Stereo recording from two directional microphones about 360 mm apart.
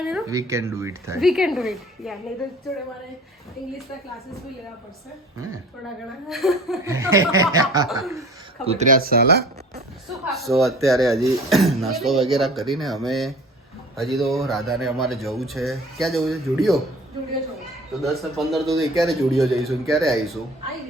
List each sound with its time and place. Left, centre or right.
0.0 s speech: centre
6.2 s speech: centre
8.6 s speech: centre
10.2 s speech: centre
18.0 s speech: centre